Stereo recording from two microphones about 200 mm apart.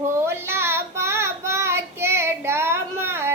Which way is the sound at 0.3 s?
10° right (ahead or behind).